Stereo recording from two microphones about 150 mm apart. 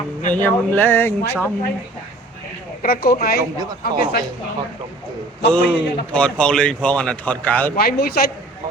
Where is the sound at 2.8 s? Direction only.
85° left.